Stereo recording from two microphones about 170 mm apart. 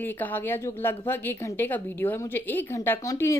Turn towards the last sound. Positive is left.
turn(degrees=20)  # may be behind; listen again after turning